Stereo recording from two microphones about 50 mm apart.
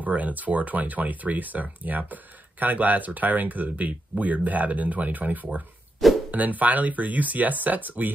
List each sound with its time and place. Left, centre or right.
0.0 s speech: right
6.0 s music: centre
6.3 s speech: right